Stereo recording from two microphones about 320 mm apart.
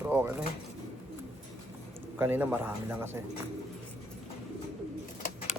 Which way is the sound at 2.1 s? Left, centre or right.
Centre.